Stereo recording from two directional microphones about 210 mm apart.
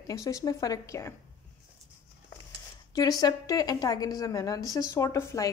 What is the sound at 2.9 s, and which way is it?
A woman's voice, 15° left (ahead or behind).